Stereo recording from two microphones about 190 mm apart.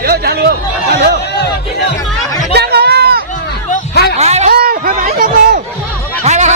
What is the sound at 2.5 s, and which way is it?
Chatter, 60° right (ahead or behind).